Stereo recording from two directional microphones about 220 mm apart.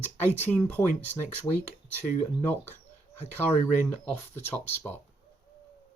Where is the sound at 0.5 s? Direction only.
10° left (ahead or behind).